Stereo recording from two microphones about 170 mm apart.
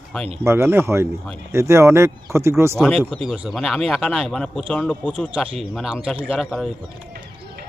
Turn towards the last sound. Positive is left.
turn(degrees=0)  # may be behind; listen again after turning